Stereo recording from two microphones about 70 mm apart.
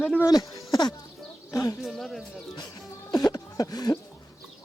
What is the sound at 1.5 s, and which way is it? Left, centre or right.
Speech, left.